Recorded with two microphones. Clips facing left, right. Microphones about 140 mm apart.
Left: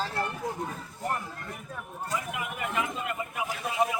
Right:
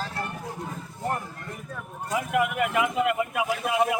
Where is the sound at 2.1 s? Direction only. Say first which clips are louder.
Right 10 dB; 65° right (ahead or behind); by 3.9 s 80° right.